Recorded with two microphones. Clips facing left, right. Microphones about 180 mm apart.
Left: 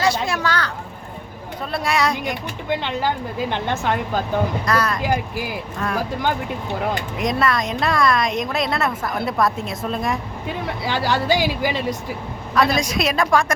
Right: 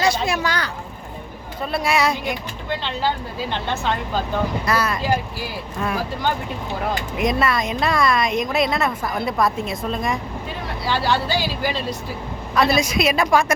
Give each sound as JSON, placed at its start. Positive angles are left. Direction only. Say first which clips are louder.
{"t": 0.0, "sound": "speech", "louder": "even", "side_deg": -15}
{"t": 1.7, "sound": "a woman's voice", "louder": "right 1 dB", "side_deg": -5}
{"t": 3.5, "sound": "speech", "louder": "even", "side_deg": 15}
{"t": 4.6, "sound": "a woman's voice", "louder": "left 1 dB", "side_deg": -5}
{"t": 5.1, "sound": "speech", "louder": "left 1 dB", "side_deg": 15}
{"t": 7.2, "sound": "a woman's voice", "louder": "right 1 dB", "side_deg": -5}
{"t": 10.8, "sound": "speech", "louder": "left 1 dB", "side_deg": 15}
{"t": 12.5, "sound": "a woman's voice", "louder": "right 1 dB", "side_deg": 0}